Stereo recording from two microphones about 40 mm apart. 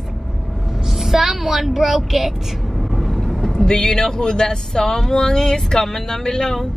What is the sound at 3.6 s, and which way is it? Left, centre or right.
Speech, centre.